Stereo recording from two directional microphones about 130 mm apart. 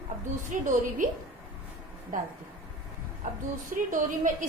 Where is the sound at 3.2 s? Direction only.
90° right.